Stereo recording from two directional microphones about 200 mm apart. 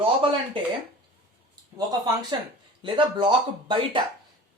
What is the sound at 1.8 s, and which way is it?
A man's voice, 20° right (ahead or behind).